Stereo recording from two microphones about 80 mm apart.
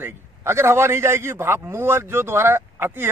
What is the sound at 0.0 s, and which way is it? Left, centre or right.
A man's voice, right.